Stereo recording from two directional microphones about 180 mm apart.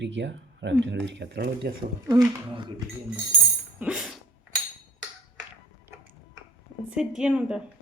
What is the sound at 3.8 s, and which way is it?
Music, 5° right (ahead or behind).